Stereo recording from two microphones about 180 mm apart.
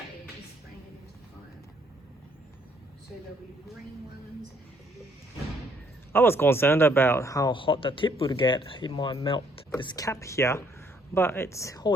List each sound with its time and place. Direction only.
6.1 s speech: 10° left (ahead or behind)